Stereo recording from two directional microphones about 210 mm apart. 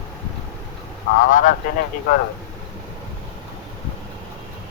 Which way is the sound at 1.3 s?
40° left (ahead or behind).